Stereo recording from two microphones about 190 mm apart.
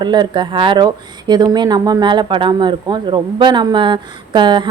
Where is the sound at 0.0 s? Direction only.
25° right (ahead or behind).